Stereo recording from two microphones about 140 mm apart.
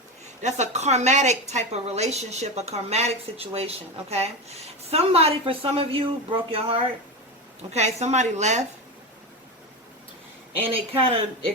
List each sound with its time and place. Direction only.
0.4 s a woman's voice: 55° right (ahead or behind)
7.7 s a woman's voice: 50° right (ahead or behind)
10.6 s a woman's voice: 45° right (ahead or behind)